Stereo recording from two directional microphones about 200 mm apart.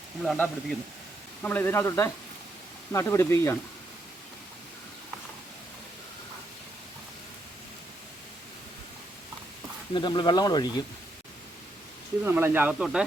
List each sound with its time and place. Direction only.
0.2 s speech: centre (ahead or behind)
9.9 s speech: 25° left (ahead or behind)
12.2 s speech: 10° right (ahead or behind)